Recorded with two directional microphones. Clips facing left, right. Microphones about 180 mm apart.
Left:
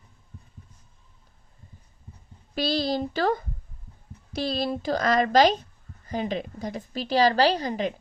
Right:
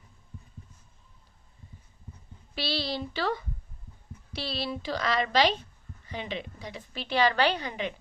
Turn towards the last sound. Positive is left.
turn(degrees=40)  # may be behind; listen again after turning